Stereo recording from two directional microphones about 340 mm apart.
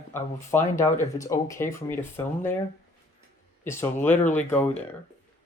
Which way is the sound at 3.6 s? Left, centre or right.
Centre.